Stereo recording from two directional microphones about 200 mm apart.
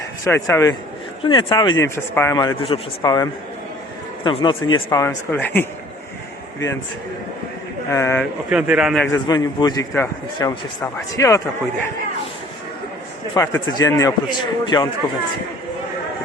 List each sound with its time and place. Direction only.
0.3 s a man's voice: 10° left (ahead or behind)
7.9 s a man's voice: 15° left (ahead or behind)
8.2 s speech: 5° right (ahead or behind)
9.2 s a man's voice: 20° left (ahead or behind)
13.3 s a man's voice: 15° left (ahead or behind)